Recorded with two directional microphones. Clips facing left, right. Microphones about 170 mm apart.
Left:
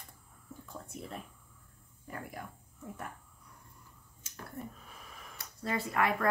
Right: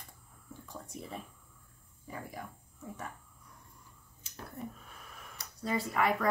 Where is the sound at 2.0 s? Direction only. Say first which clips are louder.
Even; centre (ahead or behind).